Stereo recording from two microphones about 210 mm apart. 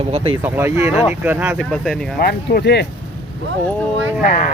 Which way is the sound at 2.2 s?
45° left (ahead or behind).